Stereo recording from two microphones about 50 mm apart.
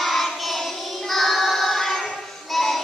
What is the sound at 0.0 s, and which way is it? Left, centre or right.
Child singing, centre.